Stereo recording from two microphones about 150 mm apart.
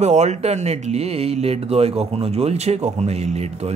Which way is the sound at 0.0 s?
50° right (ahead or behind).